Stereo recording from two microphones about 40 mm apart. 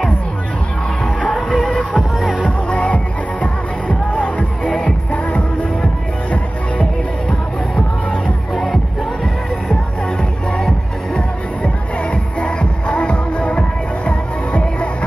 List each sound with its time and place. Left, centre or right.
1.3 s music: centre
2.0 s music: centre
2.4 s music: left
7.2 s music: centre
11.1 s music: left